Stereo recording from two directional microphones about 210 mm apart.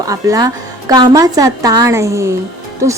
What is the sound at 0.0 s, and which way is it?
A woman's voice, 15° right (ahead or behind).